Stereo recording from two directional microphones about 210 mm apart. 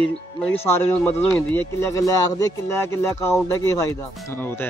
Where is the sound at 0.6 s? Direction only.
10° left (ahead or behind).